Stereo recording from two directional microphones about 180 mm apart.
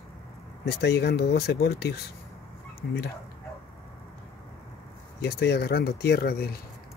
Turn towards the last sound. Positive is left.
turn(degrees=60)  # may be behind; listen again after turning